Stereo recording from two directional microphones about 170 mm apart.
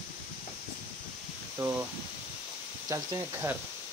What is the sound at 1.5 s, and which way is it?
Speech, 15° right (ahead or behind).